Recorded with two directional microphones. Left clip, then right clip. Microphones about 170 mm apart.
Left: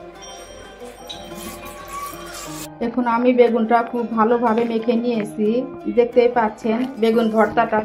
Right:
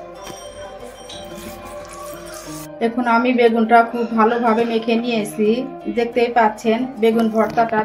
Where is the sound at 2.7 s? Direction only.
30° left (ahead or behind).